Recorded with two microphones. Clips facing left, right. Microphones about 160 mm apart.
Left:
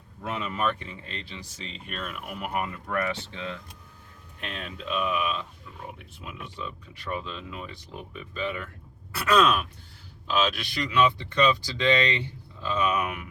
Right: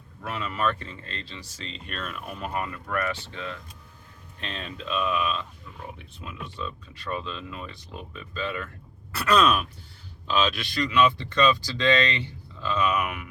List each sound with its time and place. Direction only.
0.2 s speech: 20° left (ahead or behind)
4.4 s speech: 5° left (ahead or behind)
9.1 s sigh: 5° left (ahead or behind)
10.8 s speech: 15° left (ahead or behind)